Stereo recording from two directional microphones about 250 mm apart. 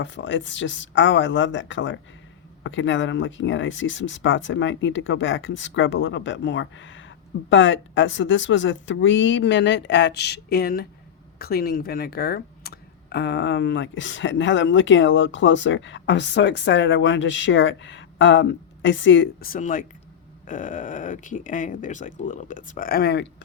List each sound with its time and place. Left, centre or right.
0.0 s speech: left